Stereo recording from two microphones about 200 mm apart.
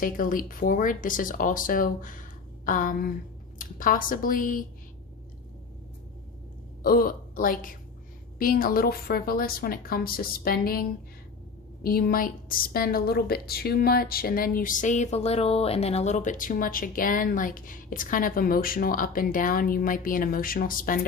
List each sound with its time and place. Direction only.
0.0 s a woman's voice: 45° left (ahead or behind)
6.8 s a woman's voice: 45° left (ahead or behind)